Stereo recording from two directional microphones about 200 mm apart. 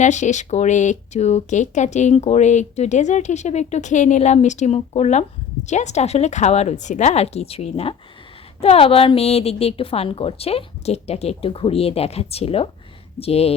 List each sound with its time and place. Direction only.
0.0 s a woman's voice: 35° left (ahead or behind)